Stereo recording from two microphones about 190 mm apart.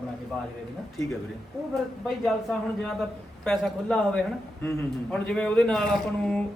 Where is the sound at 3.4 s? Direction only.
5° left (ahead or behind).